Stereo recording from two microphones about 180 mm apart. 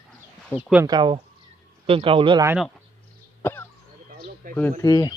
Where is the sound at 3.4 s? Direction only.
10° left (ahead or behind).